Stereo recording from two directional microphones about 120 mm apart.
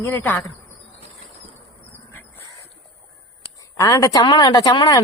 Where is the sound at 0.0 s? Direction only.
20° left (ahead or behind).